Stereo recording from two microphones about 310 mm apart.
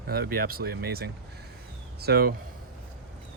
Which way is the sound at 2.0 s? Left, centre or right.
Right.